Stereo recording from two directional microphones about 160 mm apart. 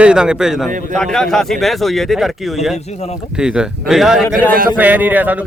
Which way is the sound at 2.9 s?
40° left (ahead or behind).